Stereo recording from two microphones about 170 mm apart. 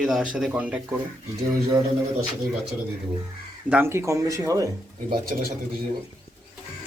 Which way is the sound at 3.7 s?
10° right (ahead or behind).